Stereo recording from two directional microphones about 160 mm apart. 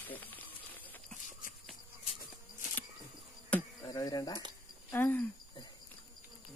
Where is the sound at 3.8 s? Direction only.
25° left (ahead or behind).